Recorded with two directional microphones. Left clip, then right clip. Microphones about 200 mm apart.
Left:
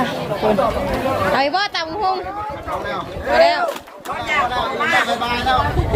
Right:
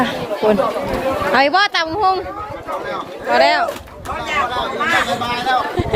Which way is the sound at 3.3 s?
40° right (ahead or behind).